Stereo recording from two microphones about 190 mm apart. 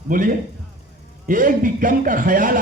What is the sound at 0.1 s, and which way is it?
A man's voice, 45° right (ahead or behind).